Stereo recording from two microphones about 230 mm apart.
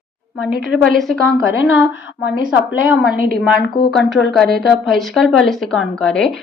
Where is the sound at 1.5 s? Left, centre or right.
Left.